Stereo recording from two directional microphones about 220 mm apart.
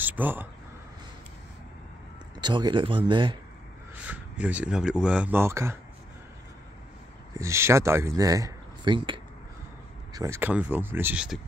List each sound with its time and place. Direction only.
0.0 s speech: 10° right (ahead or behind)
2.3 s speech: 20° right (ahead or behind)
4.0 s speech: 5° right (ahead or behind)
7.3 s speech: 10° right (ahead or behind)